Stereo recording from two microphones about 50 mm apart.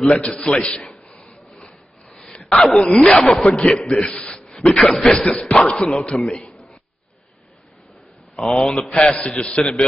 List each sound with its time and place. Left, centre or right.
0.3 s speech: centre
0.6 s a man's voice: centre
1.1 s rub: centre
2.5 s a man's voice: centre
4.1 s speech: centre
4.6 s a man's voice: centre
6.5 s a sound: centre
8.4 s speech: centre